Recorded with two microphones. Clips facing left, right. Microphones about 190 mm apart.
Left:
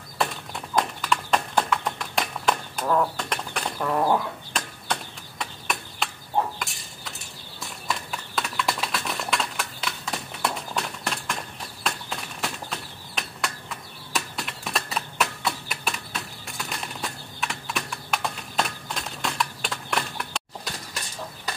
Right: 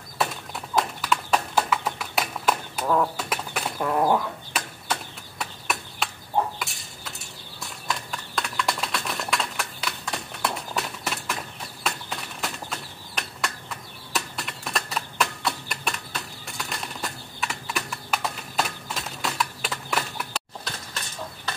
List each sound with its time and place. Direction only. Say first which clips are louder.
0.2 s horse: even; centre (ahead or behind)
4.5 s a sound: even; 5° right (ahead or behind)
6.6 s horse: even; centre (ahead or behind)
11.8 s bird flight: even; centre (ahead or behind)